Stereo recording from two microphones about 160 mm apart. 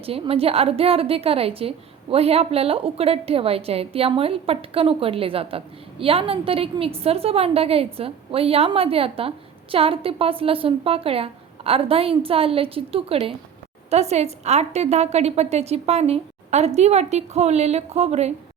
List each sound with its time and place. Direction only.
0.0 s a woman's voice: 35° right (ahead or behind)